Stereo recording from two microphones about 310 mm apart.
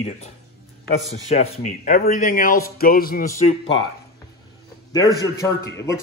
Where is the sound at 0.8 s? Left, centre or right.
Left.